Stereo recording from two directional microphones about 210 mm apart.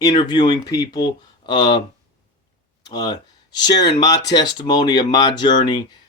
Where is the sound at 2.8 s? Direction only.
20° left (ahead or behind).